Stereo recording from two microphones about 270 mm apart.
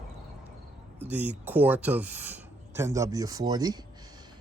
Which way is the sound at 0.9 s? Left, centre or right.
Centre.